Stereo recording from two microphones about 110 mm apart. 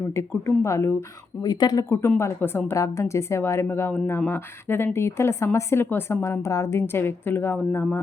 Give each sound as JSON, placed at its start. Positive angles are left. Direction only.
{"t": 0.2, "sound": "speech", "side_deg": 25}
{"t": 1.5, "sound": "speech", "side_deg": 40}
{"t": 2.0, "sound": "speech", "side_deg": 20}